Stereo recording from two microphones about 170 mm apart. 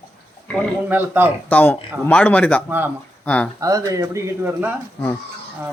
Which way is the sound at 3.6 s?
20° right (ahead or behind).